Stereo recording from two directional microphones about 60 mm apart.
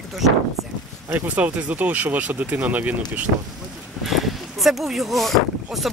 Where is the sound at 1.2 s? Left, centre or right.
Right.